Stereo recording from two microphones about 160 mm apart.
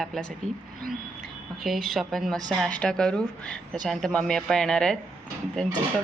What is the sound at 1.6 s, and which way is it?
Speech, centre (ahead or behind).